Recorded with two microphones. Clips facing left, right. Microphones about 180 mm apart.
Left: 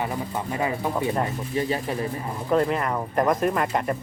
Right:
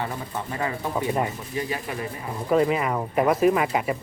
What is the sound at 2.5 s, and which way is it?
Speech, 5° right (ahead or behind).